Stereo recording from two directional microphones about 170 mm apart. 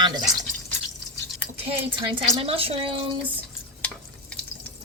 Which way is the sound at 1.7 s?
30° right (ahead or behind).